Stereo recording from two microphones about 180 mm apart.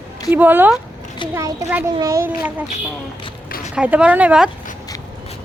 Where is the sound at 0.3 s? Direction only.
10° right (ahead or behind).